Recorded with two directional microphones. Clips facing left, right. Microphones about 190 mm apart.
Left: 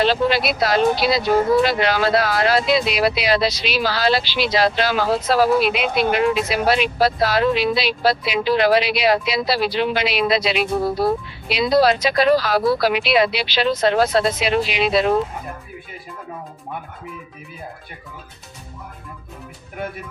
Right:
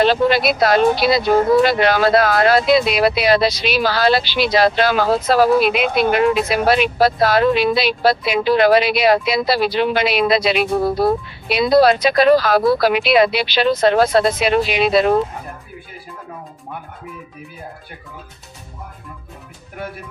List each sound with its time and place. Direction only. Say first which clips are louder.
0.0 s speech: right 3 dB; 50° right (ahead or behind)